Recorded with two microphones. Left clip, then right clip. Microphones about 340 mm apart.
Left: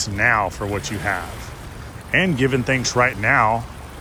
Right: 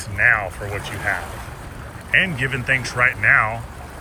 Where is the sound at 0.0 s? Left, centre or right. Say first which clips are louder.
Right 1 dB; left.